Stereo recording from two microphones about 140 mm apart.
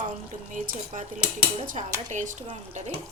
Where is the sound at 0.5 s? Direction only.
70° right (ahead or behind).